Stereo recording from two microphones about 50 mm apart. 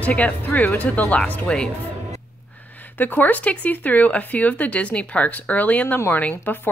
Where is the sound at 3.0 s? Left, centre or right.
Left.